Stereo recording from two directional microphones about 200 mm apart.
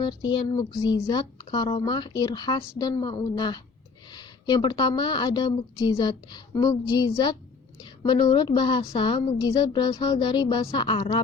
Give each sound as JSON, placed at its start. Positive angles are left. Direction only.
{"t": 0.0, "sound": "a woman's voice", "side_deg": 20}
{"t": 7.8, "sound": "a sound", "side_deg": 20}
{"t": 8.2, "sound": "a woman's voice", "side_deg": 25}